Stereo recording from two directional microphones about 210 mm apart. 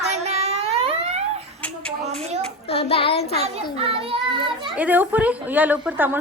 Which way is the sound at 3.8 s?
25° right (ahead or behind).